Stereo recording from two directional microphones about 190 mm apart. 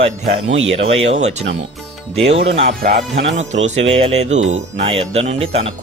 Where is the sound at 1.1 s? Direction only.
35° right (ahead or behind).